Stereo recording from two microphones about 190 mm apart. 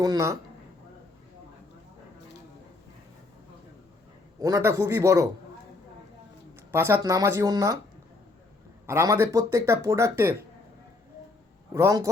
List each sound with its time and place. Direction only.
0.0 s speech: 15° right (ahead or behind)
4.4 s speech: 20° right (ahead or behind)
6.7 s speech: 15° right (ahead or behind)
8.9 s speech: 15° right (ahead or behind)
11.7 s speech: 15° right (ahead or behind)